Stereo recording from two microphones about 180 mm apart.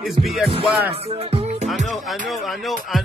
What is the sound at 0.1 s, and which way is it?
Music, centre (ahead or behind).